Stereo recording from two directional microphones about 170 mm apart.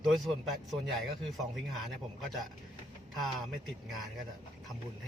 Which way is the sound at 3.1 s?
Centre (ahead or behind).